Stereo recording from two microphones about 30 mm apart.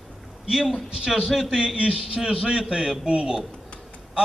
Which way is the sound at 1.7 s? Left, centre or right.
Right.